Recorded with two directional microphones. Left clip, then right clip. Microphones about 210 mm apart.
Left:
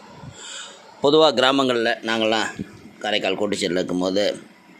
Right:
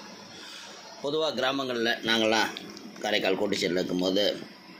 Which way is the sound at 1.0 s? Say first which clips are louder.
Left 12 dB; 45° left (ahead or behind).